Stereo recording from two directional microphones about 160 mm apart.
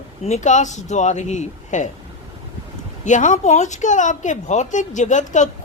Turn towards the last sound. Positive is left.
turn(degrees=50)  # may be behind; listen again after turning